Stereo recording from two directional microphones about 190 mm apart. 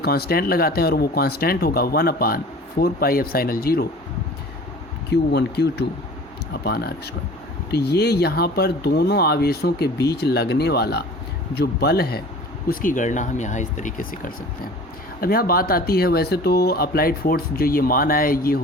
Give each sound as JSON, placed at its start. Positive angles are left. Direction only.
{"t": 0.0, "sound": "speech", "side_deg": 55}
{"t": 5.1, "sound": "speech", "side_deg": 60}